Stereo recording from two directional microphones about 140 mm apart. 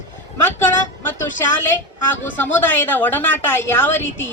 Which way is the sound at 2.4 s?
15° left (ahead or behind).